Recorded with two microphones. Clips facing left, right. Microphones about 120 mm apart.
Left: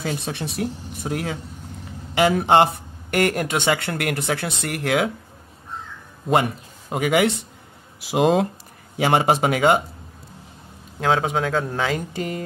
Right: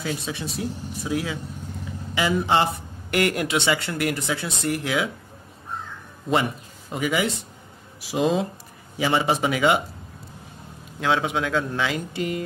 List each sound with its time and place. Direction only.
0.0 s a man's voice: 60° left (ahead or behind)
6.9 s a man's voice: 55° left (ahead or behind)
11.0 s speech: 40° left (ahead or behind)